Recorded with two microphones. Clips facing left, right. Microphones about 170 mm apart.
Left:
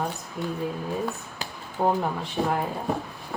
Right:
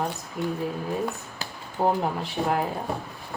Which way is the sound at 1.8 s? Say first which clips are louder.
Even; 20° right (ahead or behind).